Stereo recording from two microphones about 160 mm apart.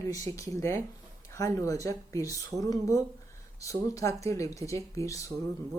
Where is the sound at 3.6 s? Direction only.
20° left (ahead or behind).